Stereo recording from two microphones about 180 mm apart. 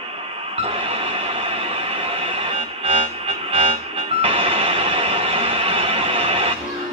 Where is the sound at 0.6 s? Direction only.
30° right (ahead or behind).